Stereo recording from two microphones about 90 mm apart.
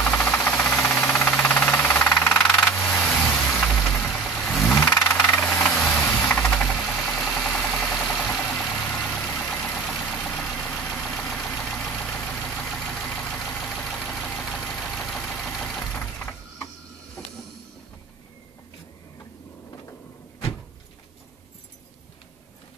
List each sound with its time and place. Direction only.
0.0 s a sound: 15° left (ahead or behind)
0.3 s engine knocking: 5° left (ahead or behind)
1.2 s engine knocking: 15° left (ahead or behind)
2.1 s vehicle: 10° left (ahead or behind)
5.1 s engine knocking: 5° left (ahead or behind)
5.8 s a sound: 10° left (ahead or behind)
6.1 s engine: 5° left (ahead or behind)
8.2 s vehicle: 15° left (ahead or behind)
10.6 s vehicle: 5° left (ahead or behind)
13.6 s engine: centre (ahead or behind)
15.9 s a sound: 5° left (ahead or behind)